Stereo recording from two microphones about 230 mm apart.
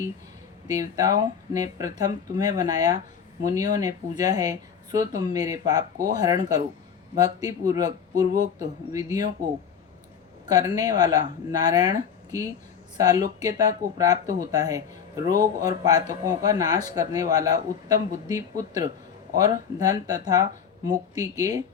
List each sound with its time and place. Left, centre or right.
0.7 s speech: centre
10.5 s speech: centre